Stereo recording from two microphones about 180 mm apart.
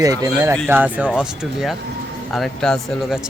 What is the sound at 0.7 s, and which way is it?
Speech, 10° right (ahead or behind).